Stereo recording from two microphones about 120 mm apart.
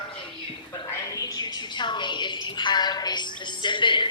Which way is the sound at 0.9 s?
30° left (ahead or behind).